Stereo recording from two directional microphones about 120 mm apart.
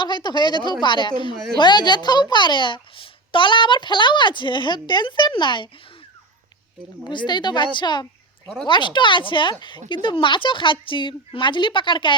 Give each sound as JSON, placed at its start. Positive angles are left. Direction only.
{"t": 0.0, "sound": "a woman's voice", "side_deg": 40}
{"t": 7.1, "sound": "a woman's voice", "side_deg": 40}